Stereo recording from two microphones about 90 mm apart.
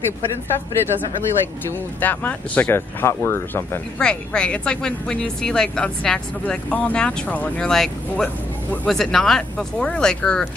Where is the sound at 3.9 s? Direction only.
10° left (ahead or behind).